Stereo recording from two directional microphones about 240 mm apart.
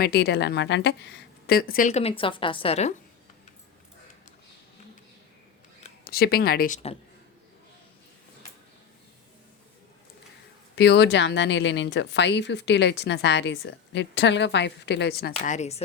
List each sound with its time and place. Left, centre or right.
0.0 s a woman's voice: left
6.1 s a woman's voice: left
10.8 s speech: left
15.3 s speech: left